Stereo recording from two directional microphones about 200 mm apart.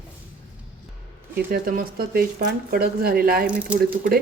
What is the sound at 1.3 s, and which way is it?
Speech, 50° right (ahead or behind).